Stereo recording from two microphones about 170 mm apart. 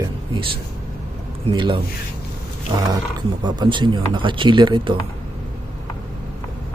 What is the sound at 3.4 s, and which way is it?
Speech, 25° right (ahead or behind).